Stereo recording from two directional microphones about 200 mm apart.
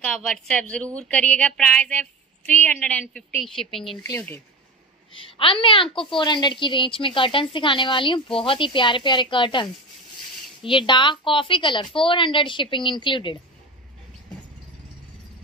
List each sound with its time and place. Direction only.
0.0 s a woman's voice: 5° left (ahead or behind)
5.1 s a woman's voice: 25° left (ahead or behind)